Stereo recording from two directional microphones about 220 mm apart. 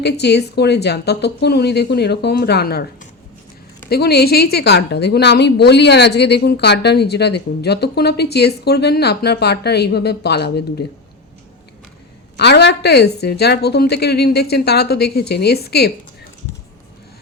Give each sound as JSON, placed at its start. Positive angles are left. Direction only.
{"t": 0.0, "sound": "a woman's voice", "side_deg": 50}
{"t": 12.4, "sound": "a woman's voice", "side_deg": 50}